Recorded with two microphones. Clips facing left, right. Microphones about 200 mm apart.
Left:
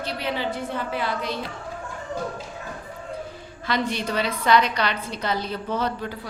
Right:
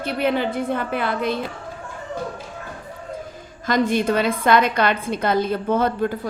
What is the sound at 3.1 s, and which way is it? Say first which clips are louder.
A woman's voice: right 1 dB; 45° right (ahead or behind).